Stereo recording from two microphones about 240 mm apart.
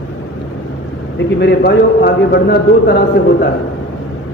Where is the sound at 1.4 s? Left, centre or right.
Left.